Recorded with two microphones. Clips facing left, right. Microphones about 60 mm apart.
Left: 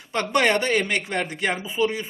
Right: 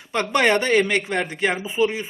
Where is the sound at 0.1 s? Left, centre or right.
Right.